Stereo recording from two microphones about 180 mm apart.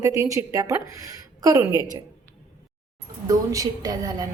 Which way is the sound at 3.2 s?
20° right (ahead or behind).